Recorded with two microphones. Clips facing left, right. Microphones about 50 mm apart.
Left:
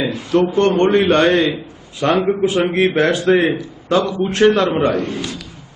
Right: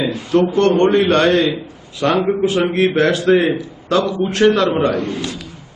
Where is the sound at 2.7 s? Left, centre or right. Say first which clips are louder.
Even; centre.